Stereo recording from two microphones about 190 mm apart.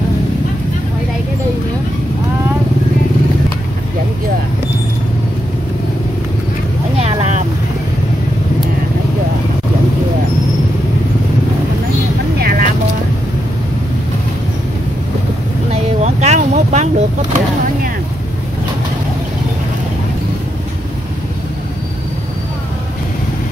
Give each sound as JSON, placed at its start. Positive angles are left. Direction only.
{"t": 7.0, "sound": "vehicle", "side_deg": -35}
{"t": 12.4, "sound": "vehicle", "side_deg": -55}
{"t": 15.7, "sound": "a sound", "side_deg": -35}